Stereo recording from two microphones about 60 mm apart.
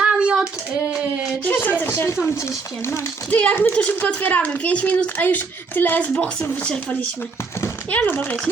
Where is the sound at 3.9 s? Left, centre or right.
Left.